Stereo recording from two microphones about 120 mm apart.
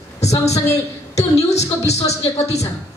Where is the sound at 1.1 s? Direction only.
65° left (ahead or behind).